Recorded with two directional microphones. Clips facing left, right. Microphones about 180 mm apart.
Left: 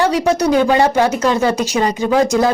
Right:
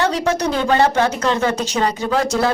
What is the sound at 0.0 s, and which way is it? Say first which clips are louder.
Speech: left 4 dB; 10° left (ahead or behind).